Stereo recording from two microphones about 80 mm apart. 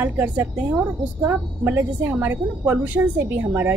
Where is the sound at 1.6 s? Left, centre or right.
Right.